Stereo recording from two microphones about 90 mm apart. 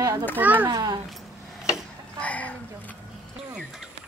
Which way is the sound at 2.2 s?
15° left (ahead or behind).